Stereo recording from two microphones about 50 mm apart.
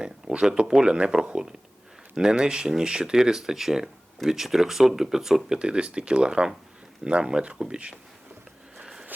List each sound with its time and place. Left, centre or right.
0.0 s speech: centre
5.5 s speech: centre